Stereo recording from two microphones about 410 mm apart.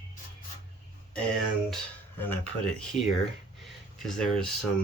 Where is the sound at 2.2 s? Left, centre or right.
Centre.